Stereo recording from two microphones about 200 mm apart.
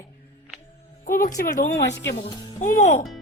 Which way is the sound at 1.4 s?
55° left (ahead or behind).